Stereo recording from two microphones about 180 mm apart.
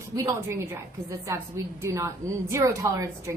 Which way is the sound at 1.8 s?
15° right (ahead or behind).